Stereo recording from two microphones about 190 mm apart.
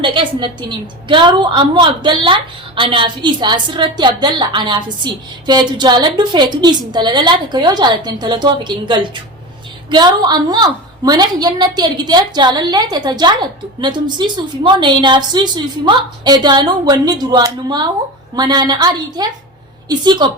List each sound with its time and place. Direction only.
0.0 s a woman's voice: 25° right (ahead or behind)